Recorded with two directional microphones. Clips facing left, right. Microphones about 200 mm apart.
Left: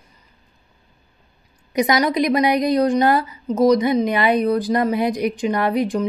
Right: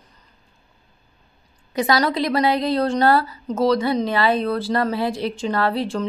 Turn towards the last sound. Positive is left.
turn(degrees=15)  # may be behind; listen again after turning